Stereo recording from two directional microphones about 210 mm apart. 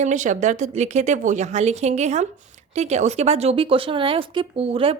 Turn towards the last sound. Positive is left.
turn(degrees=-25)  # may be behind; listen again after turning